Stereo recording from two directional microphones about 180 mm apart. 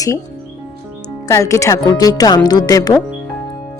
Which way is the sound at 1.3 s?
15° left (ahead or behind).